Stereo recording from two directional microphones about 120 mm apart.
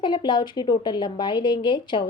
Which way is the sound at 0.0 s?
40° left (ahead or behind).